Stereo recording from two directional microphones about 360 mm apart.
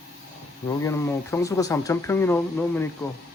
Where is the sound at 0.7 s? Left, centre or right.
Centre.